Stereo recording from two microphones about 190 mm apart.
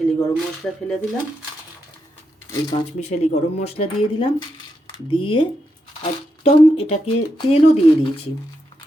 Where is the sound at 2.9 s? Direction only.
40° left (ahead or behind).